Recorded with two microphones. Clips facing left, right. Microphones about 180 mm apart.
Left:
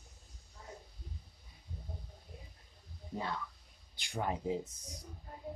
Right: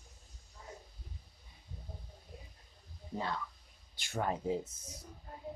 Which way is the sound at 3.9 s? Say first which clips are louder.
Right 1 dB; 15° left (ahead or behind).